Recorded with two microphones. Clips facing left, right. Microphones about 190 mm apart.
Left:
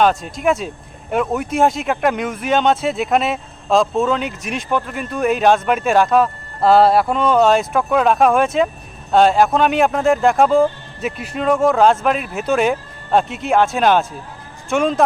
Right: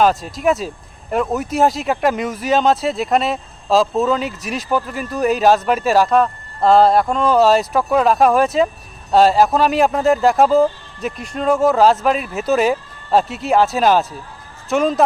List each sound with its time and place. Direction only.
0.0 s speech: centre (ahead or behind)